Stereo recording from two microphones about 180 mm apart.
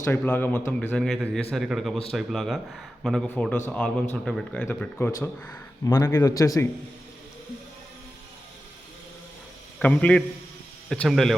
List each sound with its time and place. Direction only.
0.0 s a man's voice: 10° left (ahead or behind)
9.7 s a man's voice: 10° left (ahead or behind)